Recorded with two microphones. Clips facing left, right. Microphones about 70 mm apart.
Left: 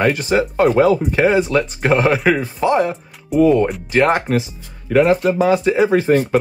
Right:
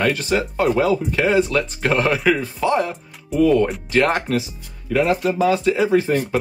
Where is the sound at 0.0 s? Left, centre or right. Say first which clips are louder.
Left 4 dB; left.